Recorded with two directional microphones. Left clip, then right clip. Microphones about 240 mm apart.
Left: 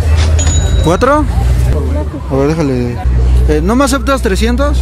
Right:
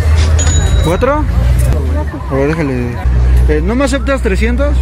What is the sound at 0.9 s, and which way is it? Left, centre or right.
Speech, centre.